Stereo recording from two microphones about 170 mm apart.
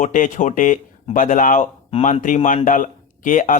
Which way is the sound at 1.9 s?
35° left (ahead or behind).